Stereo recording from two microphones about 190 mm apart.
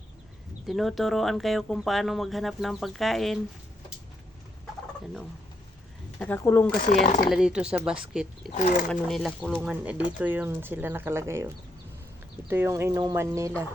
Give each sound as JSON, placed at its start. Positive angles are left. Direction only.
{"t": 0.7, "sound": "speech", "side_deg": 0}
{"t": 6.1, "sound": "speech", "side_deg": 10}
{"t": 6.9, "sound": "speech", "side_deg": 40}
{"t": 7.3, "sound": "speech", "side_deg": -5}